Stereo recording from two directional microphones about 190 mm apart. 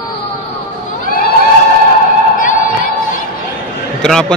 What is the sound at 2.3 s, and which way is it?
Music, 45° left (ahead or behind).